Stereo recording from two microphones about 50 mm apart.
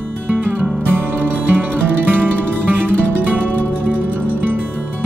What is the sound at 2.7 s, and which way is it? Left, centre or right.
Music, right.